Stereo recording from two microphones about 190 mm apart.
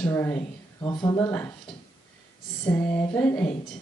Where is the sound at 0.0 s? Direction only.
10° left (ahead or behind).